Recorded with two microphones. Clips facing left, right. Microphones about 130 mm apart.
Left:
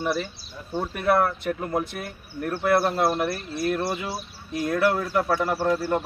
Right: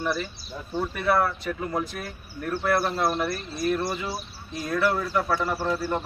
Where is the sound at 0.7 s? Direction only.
50° left (ahead or behind).